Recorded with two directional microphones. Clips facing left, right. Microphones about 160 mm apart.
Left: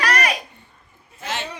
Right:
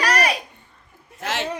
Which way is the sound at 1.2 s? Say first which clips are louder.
Right 3 dB; 80° right.